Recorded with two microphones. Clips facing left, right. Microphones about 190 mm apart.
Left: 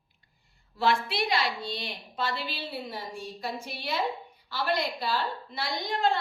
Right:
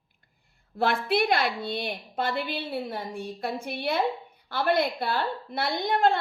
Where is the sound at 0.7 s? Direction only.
55° right (ahead or behind).